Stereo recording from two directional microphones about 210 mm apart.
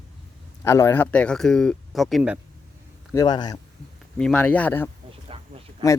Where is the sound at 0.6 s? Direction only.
15° left (ahead or behind); by 2.4 s 5° right (ahead or behind).